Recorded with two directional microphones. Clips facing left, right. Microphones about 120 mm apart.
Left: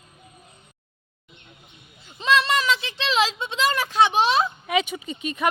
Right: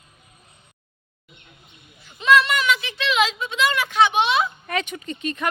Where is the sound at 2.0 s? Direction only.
30° left (ahead or behind).